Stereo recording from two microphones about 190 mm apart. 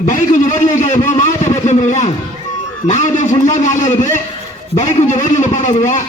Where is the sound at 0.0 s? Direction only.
40° left (ahead or behind).